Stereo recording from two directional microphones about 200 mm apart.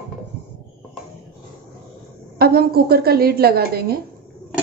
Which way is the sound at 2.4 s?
50° right (ahead or behind).